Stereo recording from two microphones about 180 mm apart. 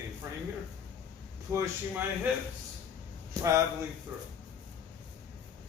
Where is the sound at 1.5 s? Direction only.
15° right (ahead or behind).